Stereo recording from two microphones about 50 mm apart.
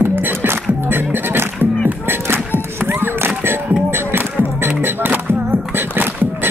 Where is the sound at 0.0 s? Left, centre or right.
Right.